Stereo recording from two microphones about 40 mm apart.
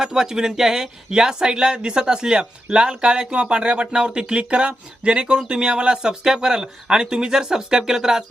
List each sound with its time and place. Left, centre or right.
0.0 s speech: centre